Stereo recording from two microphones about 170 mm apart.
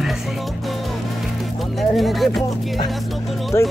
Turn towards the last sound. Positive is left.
turn(degrees=15)  # may be behind; listen again after turning